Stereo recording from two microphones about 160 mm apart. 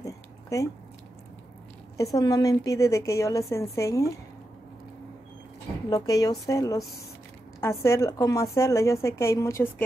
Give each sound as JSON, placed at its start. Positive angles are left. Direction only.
{"t": 0.0, "sound": "a sound", "side_deg": 20}
{"t": 2.1, "sound": "a woman's voice", "side_deg": 20}
{"t": 5.9, "sound": "a woman's voice", "side_deg": 25}